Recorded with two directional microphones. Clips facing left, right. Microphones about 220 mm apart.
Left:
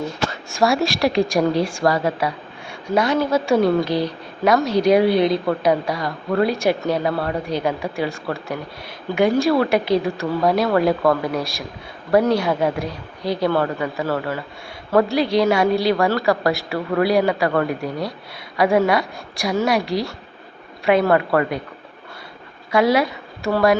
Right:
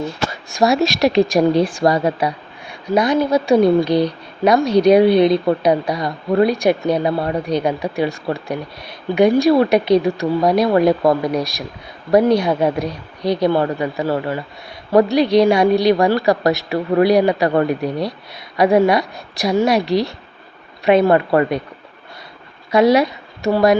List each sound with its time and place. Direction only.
0.3 s a woman's voice: 20° right (ahead or behind)
22.7 s a woman's voice: 20° right (ahead or behind)